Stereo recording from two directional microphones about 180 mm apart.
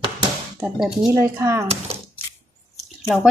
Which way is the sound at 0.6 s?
5° right (ahead or behind).